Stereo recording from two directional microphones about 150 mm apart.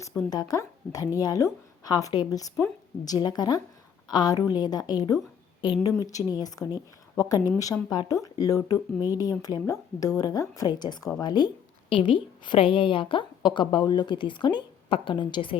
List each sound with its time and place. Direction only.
0.3 s a woman's voice: 25° left (ahead or behind)